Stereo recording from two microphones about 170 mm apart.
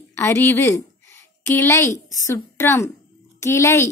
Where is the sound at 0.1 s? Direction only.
15° left (ahead or behind).